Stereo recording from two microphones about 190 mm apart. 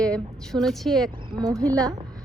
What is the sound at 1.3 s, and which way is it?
Speech, 20° right (ahead or behind).